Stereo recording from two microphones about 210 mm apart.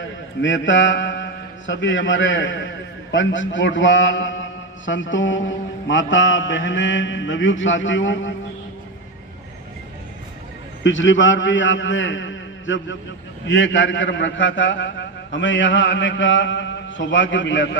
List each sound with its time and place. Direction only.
0.4 s a man's voice: 65° left (ahead or behind)
10.8 s a man's voice: 65° left (ahead or behind)